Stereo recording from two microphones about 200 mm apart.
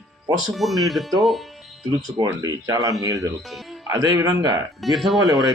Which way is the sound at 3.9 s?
15° right (ahead or behind).